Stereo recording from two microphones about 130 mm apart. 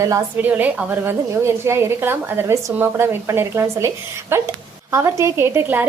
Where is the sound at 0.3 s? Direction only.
15° right (ahead or behind).